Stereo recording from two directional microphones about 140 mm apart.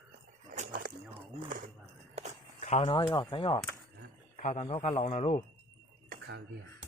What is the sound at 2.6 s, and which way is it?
Speech, 45° left (ahead or behind).